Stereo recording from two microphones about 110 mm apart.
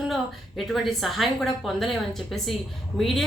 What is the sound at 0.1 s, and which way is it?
A woman's voice, centre (ahead or behind).